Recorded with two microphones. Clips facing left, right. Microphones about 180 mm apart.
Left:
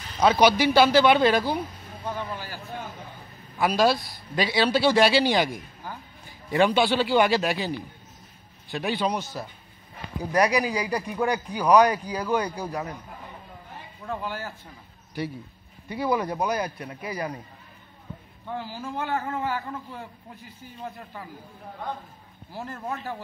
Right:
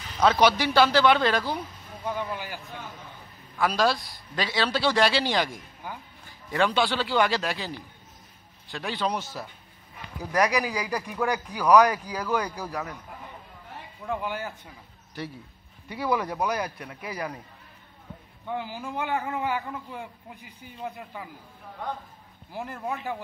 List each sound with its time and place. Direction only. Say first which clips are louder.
0.2 s a man's voice: left 2 dB; 15° left (ahead or behind)
2.0 s a man's voice: right 1 dB; 15° right (ahead or behind)
3.5 s a man's voice: left 3 dB; 15° left (ahead or behind)
10.2 s speech: left 2 dB; 25° left (ahead or behind)
14.0 s a man's voice: right 1 dB; 15° right (ahead or behind)
16.0 s speech: left 1 dB; 25° left (ahead or behind)
18.5 s a man's voice: even; 15° right (ahead or behind)
22.5 s a man's voice: right 1 dB; 15° right (ahead or behind)